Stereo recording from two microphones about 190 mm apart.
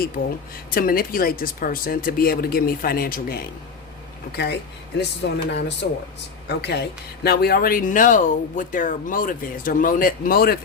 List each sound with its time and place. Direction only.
0.2 s speech: 50° left (ahead or behind)
4.9 s speech: 60° left (ahead or behind)